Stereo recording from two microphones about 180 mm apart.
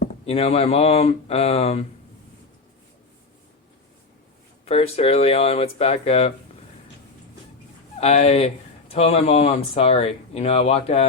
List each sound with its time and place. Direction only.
0.3 s speech: 35° left (ahead or behind)
4.6 s speech: 35° left (ahead or behind)
7.9 s speech: 35° left (ahead or behind)